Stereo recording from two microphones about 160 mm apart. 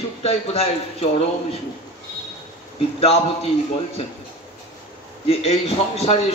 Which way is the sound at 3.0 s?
40° left (ahead or behind).